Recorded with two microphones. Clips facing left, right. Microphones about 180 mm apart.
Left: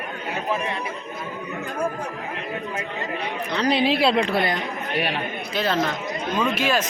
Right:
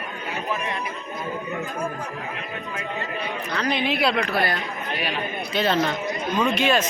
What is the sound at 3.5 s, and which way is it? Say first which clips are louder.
A woman's voice: left 4 dB; 30° left (ahead or behind).